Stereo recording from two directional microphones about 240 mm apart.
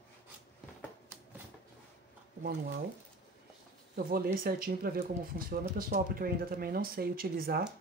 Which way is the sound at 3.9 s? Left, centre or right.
Right.